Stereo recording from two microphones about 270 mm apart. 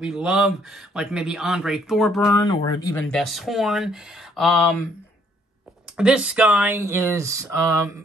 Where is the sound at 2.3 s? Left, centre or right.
Centre.